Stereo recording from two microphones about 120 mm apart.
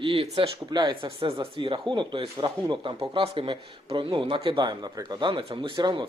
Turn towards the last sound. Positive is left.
turn(degrees=-35)  # may be behind; listen again after turning